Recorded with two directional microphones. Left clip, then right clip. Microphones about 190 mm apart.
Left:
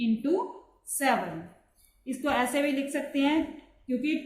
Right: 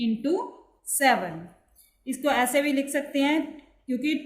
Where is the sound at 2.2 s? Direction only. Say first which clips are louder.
Right 4 dB; 55° right (ahead or behind).